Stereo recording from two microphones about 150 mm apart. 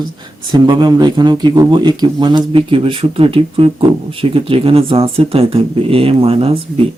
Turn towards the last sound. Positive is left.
turn(degrees=-40)  # may be behind; listen again after turning